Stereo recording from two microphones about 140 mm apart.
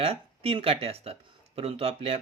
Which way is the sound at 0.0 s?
45° right (ahead or behind).